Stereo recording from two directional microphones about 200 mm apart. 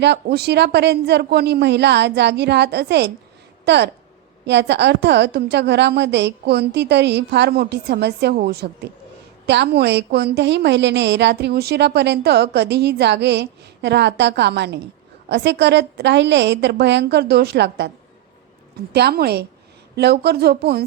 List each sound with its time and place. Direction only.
0.0 s a woman's voice: 55° right (ahead or behind)
18.9 s speech: 55° right (ahead or behind)